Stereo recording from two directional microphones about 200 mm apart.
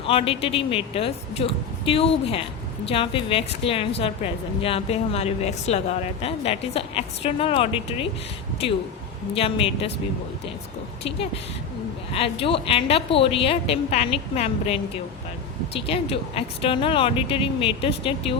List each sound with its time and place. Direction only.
0.1 s a woman's voice: 25° left (ahead or behind)
9.3 s a woman's voice: 30° left (ahead or behind)
12.1 s a woman's voice: 30° left (ahead or behind)